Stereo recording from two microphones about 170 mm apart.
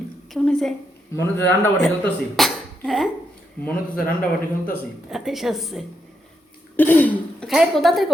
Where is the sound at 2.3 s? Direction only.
Centre (ahead or behind).